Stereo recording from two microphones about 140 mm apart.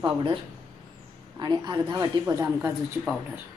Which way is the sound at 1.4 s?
30° right (ahead or behind).